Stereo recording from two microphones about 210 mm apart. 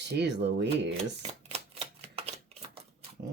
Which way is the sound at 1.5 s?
30° right (ahead or behind).